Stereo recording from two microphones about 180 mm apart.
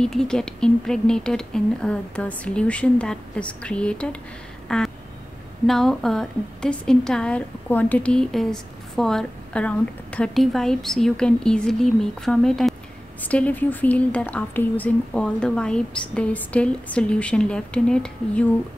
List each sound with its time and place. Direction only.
0.0 s a woman's voice: 5° left (ahead or behind)
4.6 s a sound: 5° left (ahead or behind)
5.7 s a woman's voice: centre (ahead or behind)